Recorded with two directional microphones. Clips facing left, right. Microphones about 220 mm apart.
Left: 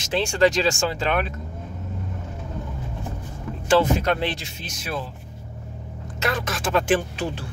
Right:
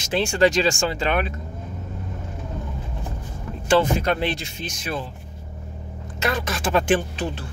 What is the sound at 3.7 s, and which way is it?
Speech, centre (ahead or behind).